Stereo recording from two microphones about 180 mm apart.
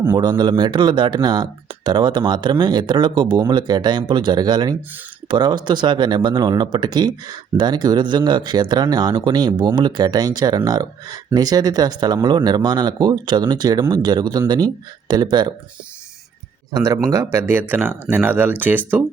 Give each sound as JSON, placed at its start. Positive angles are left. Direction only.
{"t": 0.2, "sound": "speech", "side_deg": -25}
{"t": 16.7, "sound": "speech", "side_deg": -20}